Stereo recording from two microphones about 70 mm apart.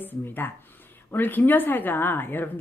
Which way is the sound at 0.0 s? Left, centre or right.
Left.